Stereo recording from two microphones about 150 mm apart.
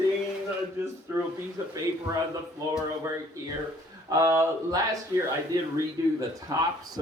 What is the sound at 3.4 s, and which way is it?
Speech, 20° right (ahead or behind).